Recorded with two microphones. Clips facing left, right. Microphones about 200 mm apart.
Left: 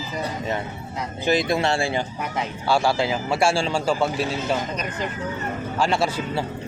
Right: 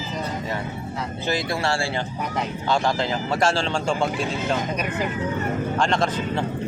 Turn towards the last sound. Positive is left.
turn(degrees=10)  # may be behind; listen again after turning